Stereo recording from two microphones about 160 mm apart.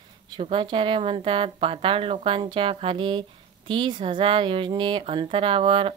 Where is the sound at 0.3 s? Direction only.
35° right (ahead or behind).